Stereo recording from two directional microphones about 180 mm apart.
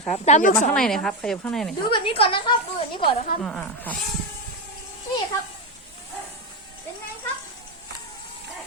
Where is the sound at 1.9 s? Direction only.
30° left (ahead or behind).